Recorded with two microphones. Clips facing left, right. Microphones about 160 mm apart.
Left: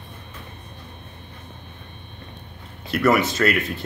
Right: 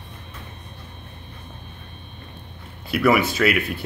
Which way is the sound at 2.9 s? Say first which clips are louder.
Even; 5° right (ahead or behind).